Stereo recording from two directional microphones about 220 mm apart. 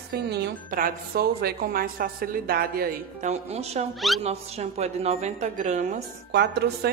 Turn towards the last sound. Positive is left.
turn(degrees=-50)  # may be behind; listen again after turning